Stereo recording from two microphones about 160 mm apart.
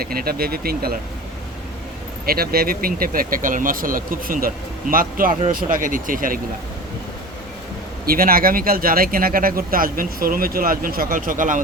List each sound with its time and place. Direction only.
0.0 s speech: 70° right (ahead or behind)
2.2 s speech: 70° right (ahead or behind)
8.0 s speech: 65° right (ahead or behind)